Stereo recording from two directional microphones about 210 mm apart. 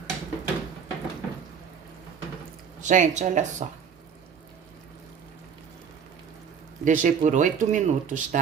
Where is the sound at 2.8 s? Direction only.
35° right (ahead or behind).